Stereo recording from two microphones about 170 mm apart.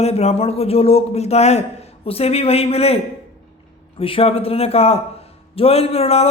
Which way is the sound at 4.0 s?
35° left (ahead or behind).